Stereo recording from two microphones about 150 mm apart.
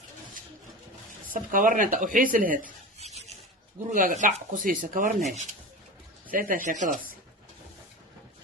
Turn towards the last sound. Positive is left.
turn(degrees=-60)  # may be behind; listen again after turning